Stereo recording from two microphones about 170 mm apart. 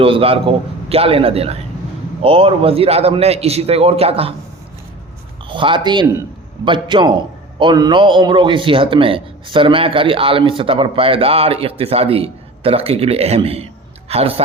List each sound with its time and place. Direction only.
0.0 s a man's voice: 35° right (ahead or behind)
5.5 s a man's voice: 30° right (ahead or behind)